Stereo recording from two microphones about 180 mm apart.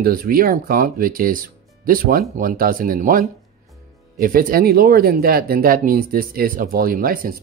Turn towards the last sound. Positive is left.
turn(degrees=-55)  # may be behind; listen again after turning